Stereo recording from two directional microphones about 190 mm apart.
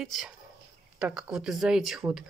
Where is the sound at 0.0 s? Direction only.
Centre (ahead or behind).